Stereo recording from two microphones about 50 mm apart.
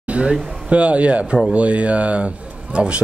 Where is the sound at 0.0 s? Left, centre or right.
Right.